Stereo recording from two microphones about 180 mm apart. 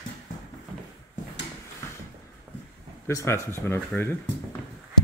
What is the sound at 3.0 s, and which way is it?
Speech, 15° left (ahead or behind).